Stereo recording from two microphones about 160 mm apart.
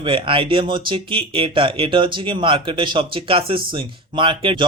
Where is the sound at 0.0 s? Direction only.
30° right (ahead or behind).